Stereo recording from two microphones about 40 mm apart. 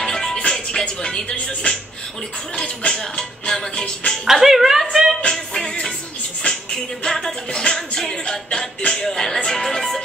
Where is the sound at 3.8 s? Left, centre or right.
Left.